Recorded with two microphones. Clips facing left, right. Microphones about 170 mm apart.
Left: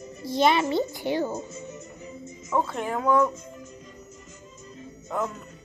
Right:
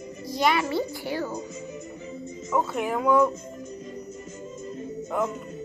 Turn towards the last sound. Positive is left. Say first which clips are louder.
# right 2 dB
turn(degrees=-10)  # may be behind; listen again after turning